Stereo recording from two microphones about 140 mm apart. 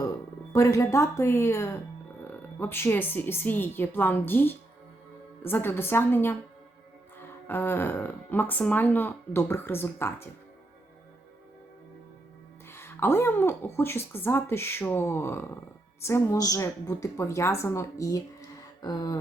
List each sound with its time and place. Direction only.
0.5 s a woman's voice: 20° left (ahead or behind)
12.6 s a woman's voice: 15° left (ahead or behind)